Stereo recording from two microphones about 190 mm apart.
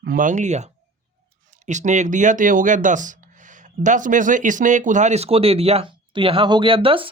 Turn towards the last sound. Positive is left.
turn(degrees=-30)  # may be behind; listen again after turning